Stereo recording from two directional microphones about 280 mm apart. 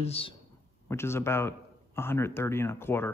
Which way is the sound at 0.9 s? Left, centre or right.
Centre.